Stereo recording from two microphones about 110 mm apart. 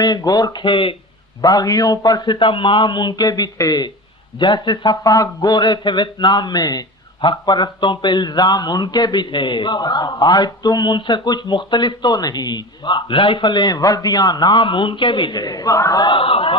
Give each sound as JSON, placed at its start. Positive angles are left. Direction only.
{"t": 0.0, "sound": "a man's voice", "side_deg": 35}
{"t": 1.4, "sound": "a man's voice", "side_deg": 35}
{"t": 16.1, "sound": "speech", "side_deg": 55}